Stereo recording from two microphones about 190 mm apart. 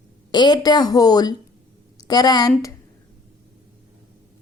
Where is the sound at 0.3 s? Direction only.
25° left (ahead or behind).